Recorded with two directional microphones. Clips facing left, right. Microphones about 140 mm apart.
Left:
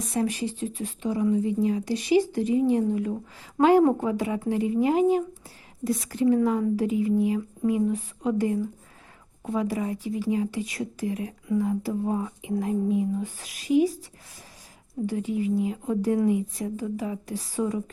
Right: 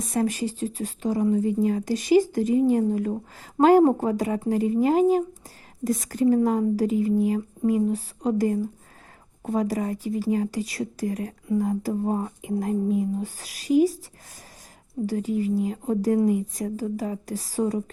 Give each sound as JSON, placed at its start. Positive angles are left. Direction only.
{"t": 0.0, "sound": "speech", "side_deg": -45}
{"t": 15.0, "sound": "speech", "side_deg": -40}